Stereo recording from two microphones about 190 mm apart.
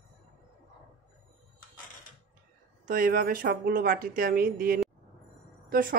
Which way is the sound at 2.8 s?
50° right (ahead or behind).